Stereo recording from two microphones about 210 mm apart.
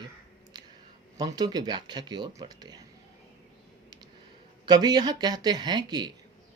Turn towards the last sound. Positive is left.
turn(degrees=-20)  # may be behind; listen again after turning